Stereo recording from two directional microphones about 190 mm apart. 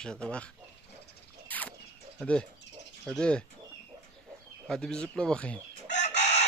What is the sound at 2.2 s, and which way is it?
Speech, 5° left (ahead or behind).